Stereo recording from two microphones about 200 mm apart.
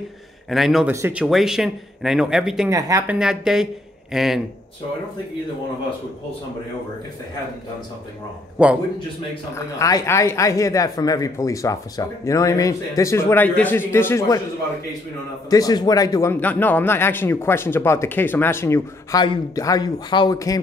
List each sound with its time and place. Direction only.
0.5 s speech: centre (ahead or behind)
2.7 s speech: 15° right (ahead or behind)
8.6 s speech: 5° right (ahead or behind)
9.3 s a man's voice: 20° left (ahead or behind)
15.5 s a man's voice: 20° left (ahead or behind)